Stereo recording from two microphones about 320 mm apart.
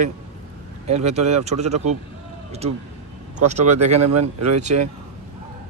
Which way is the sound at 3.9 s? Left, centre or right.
Right.